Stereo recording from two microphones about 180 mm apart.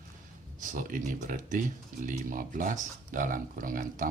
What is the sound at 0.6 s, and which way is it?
Speech, 50° right (ahead or behind).